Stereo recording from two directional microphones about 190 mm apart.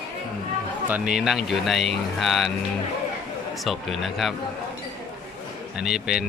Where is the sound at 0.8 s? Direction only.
5° right (ahead or behind).